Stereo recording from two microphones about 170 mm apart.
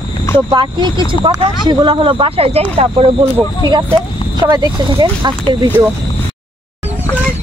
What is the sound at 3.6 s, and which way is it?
Speech, 25° right (ahead or behind).